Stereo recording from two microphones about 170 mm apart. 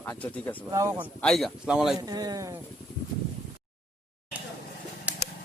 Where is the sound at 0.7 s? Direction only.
15° right (ahead or behind).